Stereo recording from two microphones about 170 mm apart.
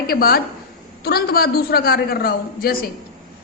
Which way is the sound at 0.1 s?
60° left (ahead or behind).